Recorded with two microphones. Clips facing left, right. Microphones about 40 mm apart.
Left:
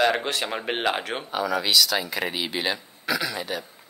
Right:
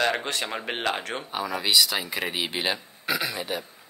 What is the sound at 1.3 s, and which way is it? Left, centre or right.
A man's voice, centre.